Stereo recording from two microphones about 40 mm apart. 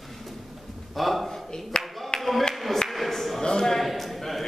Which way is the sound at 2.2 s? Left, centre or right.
Centre.